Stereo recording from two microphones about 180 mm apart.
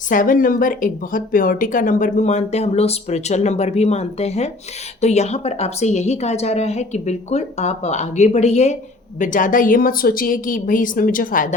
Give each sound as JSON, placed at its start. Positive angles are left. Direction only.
{"t": 0.1, "sound": "a woman's voice", "side_deg": 50}